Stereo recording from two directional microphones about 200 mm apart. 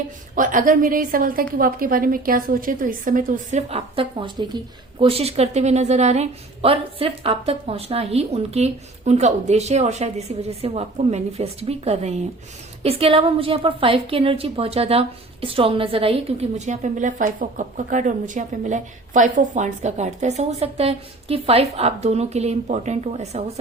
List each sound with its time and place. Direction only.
0.3 s a woman's voice: 40° right (ahead or behind)